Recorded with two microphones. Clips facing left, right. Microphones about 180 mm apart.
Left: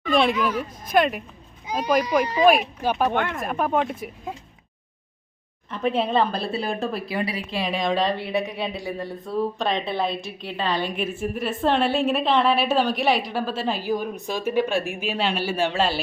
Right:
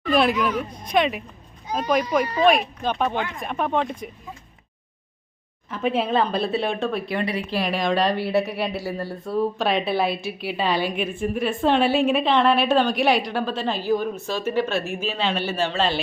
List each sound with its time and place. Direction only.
0.0 s speech: centre (ahead or behind)
2.2 s speech: 15° left (ahead or behind)
3.1 s speech: 60° left (ahead or behind)
3.3 s speech: centre (ahead or behind)
5.7 s speech: centre (ahead or behind)